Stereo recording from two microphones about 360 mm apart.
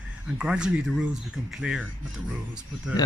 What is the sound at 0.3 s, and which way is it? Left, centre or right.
Speech, centre.